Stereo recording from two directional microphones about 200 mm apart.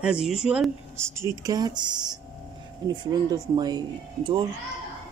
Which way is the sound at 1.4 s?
20° right (ahead or behind).